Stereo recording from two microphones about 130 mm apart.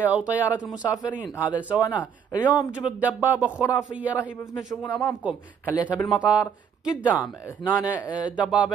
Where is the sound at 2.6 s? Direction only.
10° right (ahead or behind).